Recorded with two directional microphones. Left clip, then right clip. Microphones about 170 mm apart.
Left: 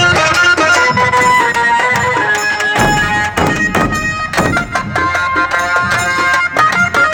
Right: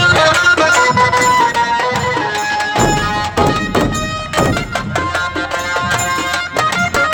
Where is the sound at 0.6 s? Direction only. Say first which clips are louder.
Left 1 dB; 20° left (ahead or behind).